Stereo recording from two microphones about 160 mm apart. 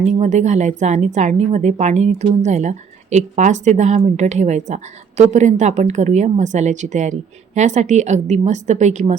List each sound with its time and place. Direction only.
0.0 s a woman's voice: 50° right (ahead or behind)